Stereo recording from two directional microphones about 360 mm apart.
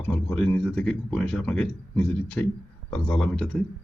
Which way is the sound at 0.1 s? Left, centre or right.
Centre.